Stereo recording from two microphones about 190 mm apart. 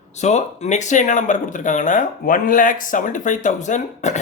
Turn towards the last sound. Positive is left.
turn(degrees=40)  # may be behind; listen again after turning